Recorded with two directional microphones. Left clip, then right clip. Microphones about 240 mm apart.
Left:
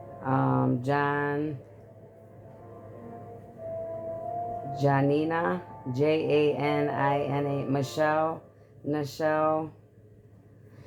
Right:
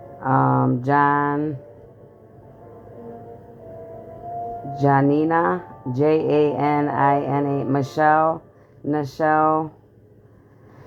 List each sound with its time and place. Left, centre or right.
0.2 s music: right
4.7 s speech: right